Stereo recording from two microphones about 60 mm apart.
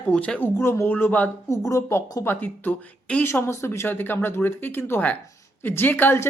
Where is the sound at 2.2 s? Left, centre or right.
Left.